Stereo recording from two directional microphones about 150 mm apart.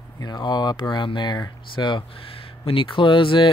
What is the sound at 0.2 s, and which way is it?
Speech, 30° left (ahead or behind).